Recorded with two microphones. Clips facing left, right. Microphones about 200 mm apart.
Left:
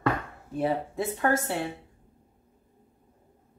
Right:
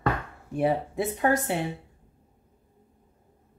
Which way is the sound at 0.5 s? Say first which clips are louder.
Right 2 dB; 15° right (ahead or behind).